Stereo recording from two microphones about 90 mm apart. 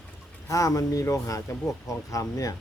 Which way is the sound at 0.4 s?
40° left (ahead or behind).